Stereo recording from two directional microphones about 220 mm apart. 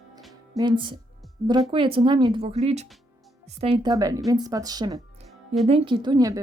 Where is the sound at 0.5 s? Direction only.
20° right (ahead or behind).